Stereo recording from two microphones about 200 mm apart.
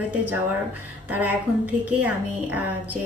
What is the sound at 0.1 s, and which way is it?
A woman's voice, 10° right (ahead or behind).